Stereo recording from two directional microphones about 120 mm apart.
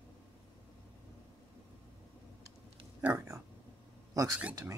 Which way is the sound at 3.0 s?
20° right (ahead or behind).